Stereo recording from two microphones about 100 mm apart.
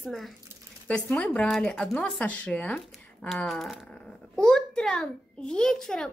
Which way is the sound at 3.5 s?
Centre (ahead or behind).